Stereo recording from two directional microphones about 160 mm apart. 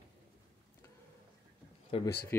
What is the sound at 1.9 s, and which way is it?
Speech, 35° left (ahead or behind).